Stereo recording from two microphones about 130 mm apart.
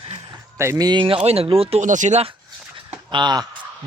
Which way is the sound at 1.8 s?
70° right (ahead or behind).